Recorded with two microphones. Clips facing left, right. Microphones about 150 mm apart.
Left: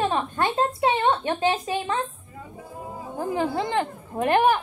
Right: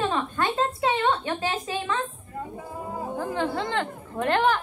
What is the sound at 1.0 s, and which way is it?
Speech, 20° left (ahead or behind).